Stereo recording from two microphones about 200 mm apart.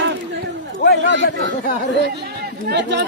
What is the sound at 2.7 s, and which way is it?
Speech, 60° right (ahead or behind).